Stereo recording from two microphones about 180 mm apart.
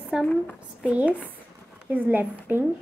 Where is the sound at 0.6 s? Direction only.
5° right (ahead or behind).